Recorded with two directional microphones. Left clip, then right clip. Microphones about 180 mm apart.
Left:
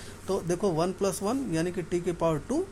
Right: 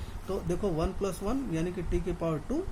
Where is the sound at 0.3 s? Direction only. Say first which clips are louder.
Left 4 dB; 30° left (ahead or behind).